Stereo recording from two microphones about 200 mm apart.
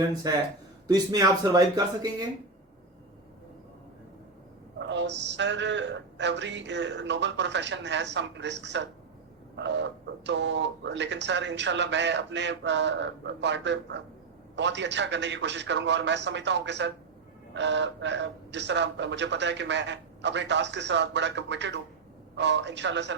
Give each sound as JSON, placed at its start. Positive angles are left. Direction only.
{"t": 0.2, "sound": "speech", "side_deg": -20}
{"t": 4.9, "sound": "speech", "side_deg": -60}